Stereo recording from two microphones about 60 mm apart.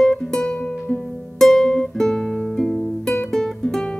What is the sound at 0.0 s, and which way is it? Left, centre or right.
Music, centre.